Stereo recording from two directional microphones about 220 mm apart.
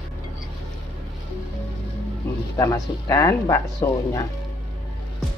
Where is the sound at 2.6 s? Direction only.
15° left (ahead or behind).